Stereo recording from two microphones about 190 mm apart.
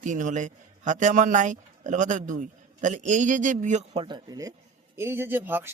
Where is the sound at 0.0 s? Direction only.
40° right (ahead or behind).